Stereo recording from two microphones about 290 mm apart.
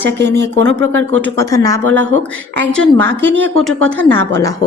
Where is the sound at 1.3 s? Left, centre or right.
Centre.